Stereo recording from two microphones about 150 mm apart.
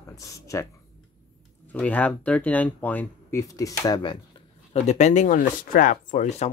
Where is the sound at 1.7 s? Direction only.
10° left (ahead or behind); by 4.2 s 30° left (ahead or behind).